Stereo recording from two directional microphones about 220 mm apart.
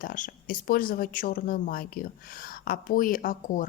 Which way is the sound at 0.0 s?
40° left (ahead or behind).